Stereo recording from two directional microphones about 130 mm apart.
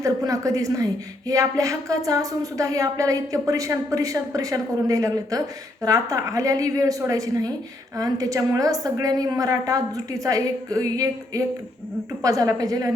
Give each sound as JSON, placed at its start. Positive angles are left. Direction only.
{"t": 0.0, "sound": "speech", "side_deg": -25}